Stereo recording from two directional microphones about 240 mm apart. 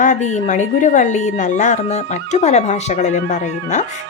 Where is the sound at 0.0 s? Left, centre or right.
Left.